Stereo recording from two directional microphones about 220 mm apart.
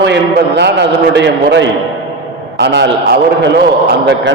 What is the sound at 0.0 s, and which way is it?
A man's voice, 50° right (ahead or behind).